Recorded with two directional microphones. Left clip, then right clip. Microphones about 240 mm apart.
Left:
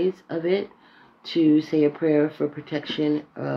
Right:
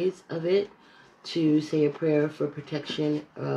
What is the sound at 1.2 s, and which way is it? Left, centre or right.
Speech, left.